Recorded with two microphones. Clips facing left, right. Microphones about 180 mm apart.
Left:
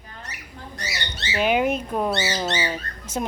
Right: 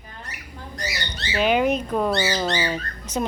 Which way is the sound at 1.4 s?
10° left (ahead or behind).